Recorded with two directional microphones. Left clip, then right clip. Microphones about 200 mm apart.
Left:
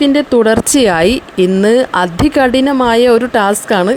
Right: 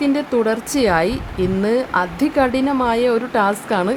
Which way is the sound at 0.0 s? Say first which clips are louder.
Left 8 dB; 25° left (ahead or behind).